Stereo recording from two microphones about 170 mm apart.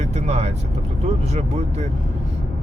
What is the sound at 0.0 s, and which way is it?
Vehicle, 40° right (ahead or behind).